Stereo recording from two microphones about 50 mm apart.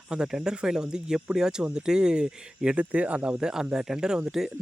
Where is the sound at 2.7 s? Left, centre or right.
Right; by 4.5 s centre.